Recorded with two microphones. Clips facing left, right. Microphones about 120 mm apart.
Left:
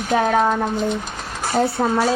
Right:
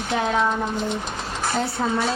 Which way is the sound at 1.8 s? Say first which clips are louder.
Left 4 dB; 45° left (ahead or behind).